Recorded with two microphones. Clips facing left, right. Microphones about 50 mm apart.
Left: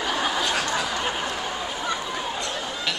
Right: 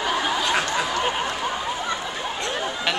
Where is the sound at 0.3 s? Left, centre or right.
Right.